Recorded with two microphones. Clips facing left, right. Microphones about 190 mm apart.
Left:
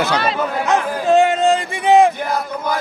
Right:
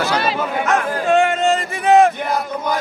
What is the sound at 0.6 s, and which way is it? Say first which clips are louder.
Speech: left 1 dB; 15° left (ahead or behind).